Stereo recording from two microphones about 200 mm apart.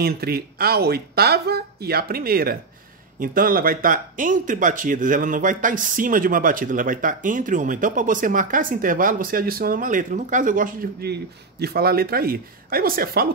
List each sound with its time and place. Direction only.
0.0 s speech: 50° right (ahead or behind)